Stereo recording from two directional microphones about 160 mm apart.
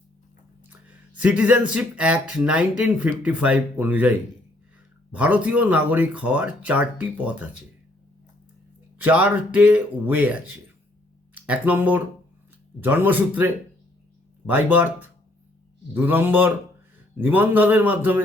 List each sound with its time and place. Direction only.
1.2 s speech: 10° right (ahead or behind)
5.1 s speech: 10° right (ahead or behind)
9.0 s speech: 10° right (ahead or behind)